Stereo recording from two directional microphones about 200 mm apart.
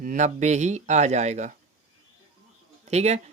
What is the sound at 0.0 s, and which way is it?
Speech, 40° right (ahead or behind).